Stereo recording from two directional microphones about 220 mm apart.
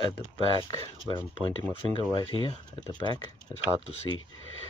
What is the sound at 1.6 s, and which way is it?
Speech, 25° right (ahead or behind).